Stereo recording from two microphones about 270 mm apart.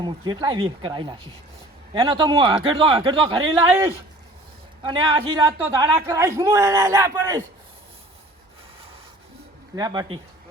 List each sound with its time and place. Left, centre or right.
0.0 s a man's voice: centre
9.7 s a man's voice: centre